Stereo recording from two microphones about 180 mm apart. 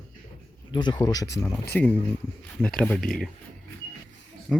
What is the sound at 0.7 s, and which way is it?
Speech, 25° left (ahead or behind).